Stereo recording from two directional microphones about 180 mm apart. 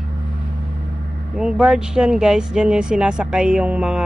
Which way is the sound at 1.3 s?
5° right (ahead or behind).